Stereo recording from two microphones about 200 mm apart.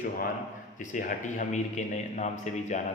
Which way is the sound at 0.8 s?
40° left (ahead or behind).